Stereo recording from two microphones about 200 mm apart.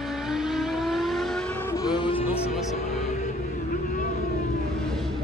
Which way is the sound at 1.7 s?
20° left (ahead or behind).